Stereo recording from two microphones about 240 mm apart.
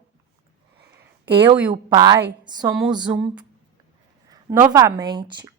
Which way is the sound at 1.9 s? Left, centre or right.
Centre.